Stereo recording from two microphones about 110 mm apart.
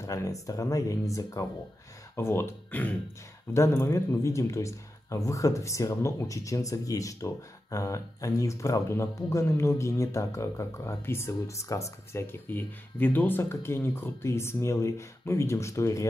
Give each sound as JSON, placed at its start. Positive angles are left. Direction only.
{"t": 0.0, "sound": "speech", "side_deg": 30}